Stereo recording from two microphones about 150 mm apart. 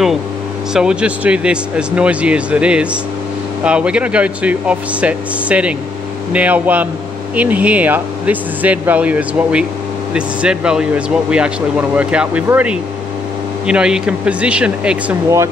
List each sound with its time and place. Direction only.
0.7 s speech: 5° right (ahead or behind)